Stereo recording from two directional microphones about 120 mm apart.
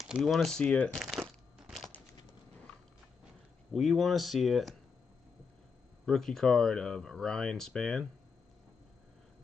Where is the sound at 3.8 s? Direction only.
Centre (ahead or behind).